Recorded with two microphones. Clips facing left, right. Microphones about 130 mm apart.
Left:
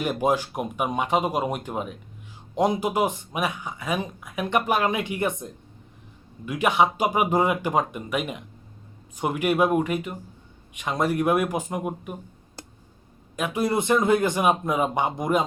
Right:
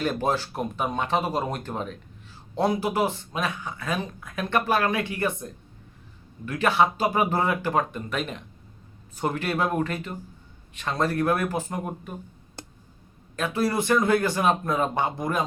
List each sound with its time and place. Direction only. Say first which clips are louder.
0.0 s speech: left 2 dB; 15° left (ahead or behind)
13.3 s speech: left 1 dB; 15° left (ahead or behind)